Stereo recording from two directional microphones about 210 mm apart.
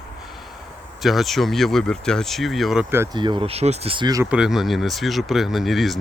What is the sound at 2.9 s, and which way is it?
Speech, 10° right (ahead or behind).